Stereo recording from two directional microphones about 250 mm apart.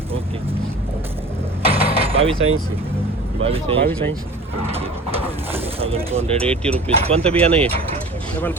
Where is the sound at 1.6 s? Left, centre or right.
Right.